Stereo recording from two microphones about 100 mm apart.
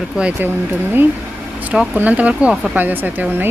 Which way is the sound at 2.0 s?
15° right (ahead or behind).